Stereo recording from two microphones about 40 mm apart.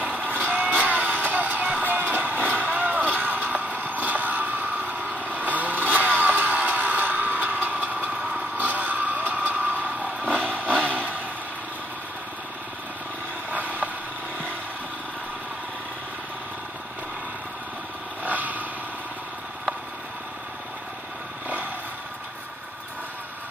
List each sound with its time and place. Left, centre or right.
0.0 s a sound: right
8.5 s vehicle: right
13.5 s vehicle: right
18.2 s vehicle: right